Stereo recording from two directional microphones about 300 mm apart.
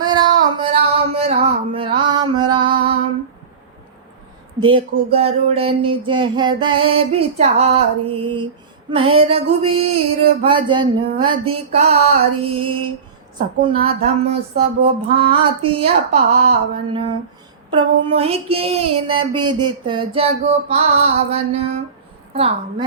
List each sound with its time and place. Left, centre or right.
0.0 s a sound: centre
4.6 s mantra: centre
6.1 s music: centre
9.0 s mantra: centre
10.4 s music: centre
11.7 s mantra: centre
13.8 s mantra: centre
22.3 s a woman's voice: centre